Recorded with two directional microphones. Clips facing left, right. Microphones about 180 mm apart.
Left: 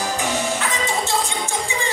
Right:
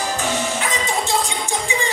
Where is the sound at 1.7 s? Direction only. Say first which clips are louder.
Right 3 dB; 15° right (ahead or behind).